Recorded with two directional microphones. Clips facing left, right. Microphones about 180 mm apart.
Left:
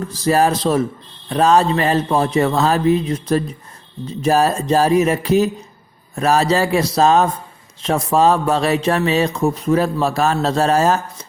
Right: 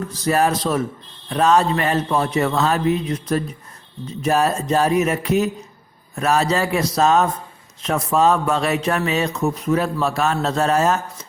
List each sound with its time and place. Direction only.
0.1 s speech: 30° left (ahead or behind)